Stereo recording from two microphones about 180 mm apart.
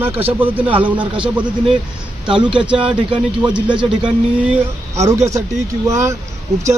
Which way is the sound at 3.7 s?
25° right (ahead or behind).